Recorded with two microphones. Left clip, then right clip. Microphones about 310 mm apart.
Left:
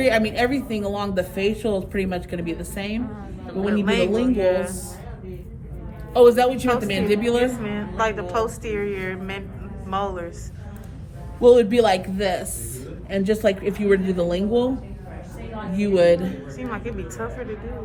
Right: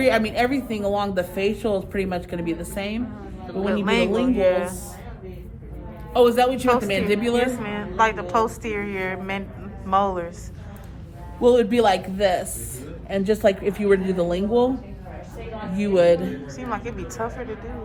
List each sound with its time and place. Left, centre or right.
0.0 s a woman's voice: centre
4.1 s a woman's voice: centre
4.4 s a woman's voice: right
6.1 s a woman's voice: centre
11.3 s a woman's voice: centre
16.0 s a woman's voice: centre